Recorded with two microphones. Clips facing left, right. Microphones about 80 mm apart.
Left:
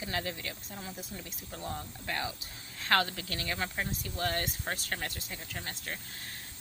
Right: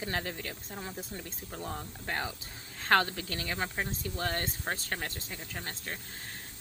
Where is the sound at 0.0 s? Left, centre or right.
Right.